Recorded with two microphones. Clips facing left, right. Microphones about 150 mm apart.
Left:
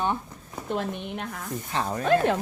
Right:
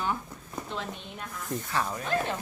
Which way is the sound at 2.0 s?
65° left (ahead or behind).